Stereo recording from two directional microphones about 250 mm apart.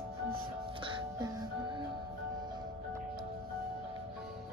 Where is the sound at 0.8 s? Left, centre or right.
Centre.